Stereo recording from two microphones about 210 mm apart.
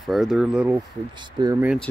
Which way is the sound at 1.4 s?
15° right (ahead or behind).